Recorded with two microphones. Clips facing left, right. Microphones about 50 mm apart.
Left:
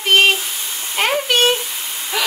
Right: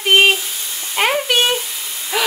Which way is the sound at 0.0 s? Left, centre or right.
Centre.